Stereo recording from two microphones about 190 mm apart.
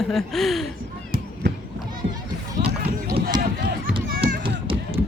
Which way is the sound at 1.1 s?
50° right (ahead or behind).